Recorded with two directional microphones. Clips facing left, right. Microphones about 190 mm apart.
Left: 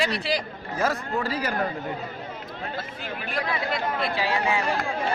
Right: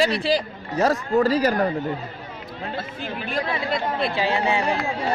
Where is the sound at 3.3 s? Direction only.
30° right (ahead or behind).